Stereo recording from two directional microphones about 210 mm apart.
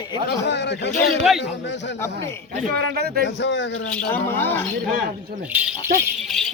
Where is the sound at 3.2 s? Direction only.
60° left (ahead or behind).